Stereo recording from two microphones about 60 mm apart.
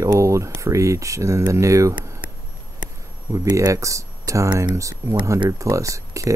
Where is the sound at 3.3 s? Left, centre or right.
Right.